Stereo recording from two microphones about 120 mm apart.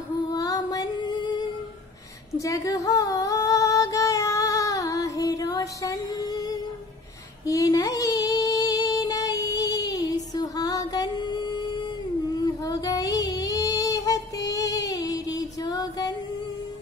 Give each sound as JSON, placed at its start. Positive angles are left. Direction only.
{"t": 0.3, "sound": "female singing", "side_deg": 30}
{"t": 2.3, "sound": "female singing", "side_deg": 25}
{"t": 7.4, "sound": "child singing", "side_deg": 25}